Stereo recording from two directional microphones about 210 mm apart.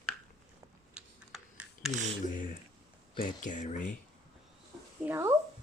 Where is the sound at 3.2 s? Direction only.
35° left (ahead or behind).